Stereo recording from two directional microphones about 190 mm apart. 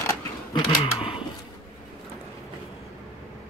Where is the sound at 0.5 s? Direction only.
25° left (ahead or behind).